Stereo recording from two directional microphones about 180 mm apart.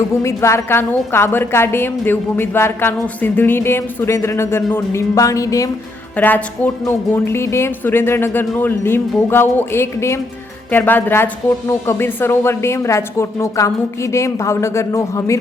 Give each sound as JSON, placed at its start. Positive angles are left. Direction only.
{"t": 0.1, "sound": "a woman's voice", "side_deg": 15}